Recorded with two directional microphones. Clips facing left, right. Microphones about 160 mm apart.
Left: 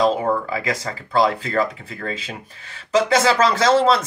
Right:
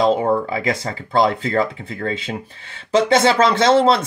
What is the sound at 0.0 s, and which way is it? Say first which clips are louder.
Speech: right 2 dB; 25° right (ahead or behind).